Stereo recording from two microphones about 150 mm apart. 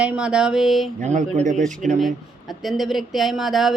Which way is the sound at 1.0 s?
50° right (ahead or behind).